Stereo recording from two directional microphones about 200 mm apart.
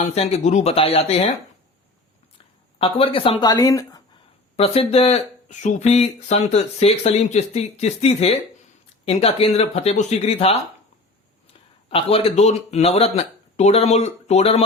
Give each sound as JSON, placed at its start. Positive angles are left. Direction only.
{"t": 0.0, "sound": "speech", "side_deg": 30}
{"t": 2.7, "sound": "speech", "side_deg": 25}
{"t": 4.5, "sound": "speech", "side_deg": 30}
{"t": 11.9, "sound": "speech", "side_deg": 30}